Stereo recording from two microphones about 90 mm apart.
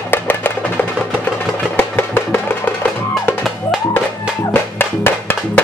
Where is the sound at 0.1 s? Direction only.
20° left (ahead or behind).